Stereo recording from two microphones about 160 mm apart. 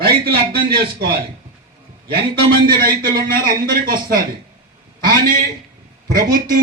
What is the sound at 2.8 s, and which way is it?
A man's voice, 65° right (ahead or behind).